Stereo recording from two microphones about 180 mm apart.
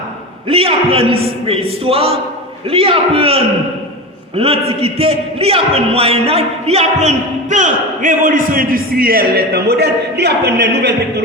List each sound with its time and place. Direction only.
0.4 s a man's voice: 30° right (ahead or behind); by 10.9 s 65° right (ahead or behind)